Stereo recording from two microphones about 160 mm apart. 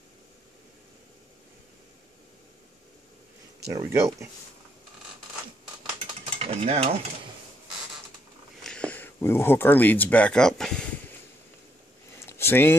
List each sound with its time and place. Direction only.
3.7 s speech: 15° right (ahead or behind)
6.3 s stir: 40° right (ahead or behind)
8.6 s speech: 5° left (ahead or behind)
12.3 s a sound: 15° left (ahead or behind)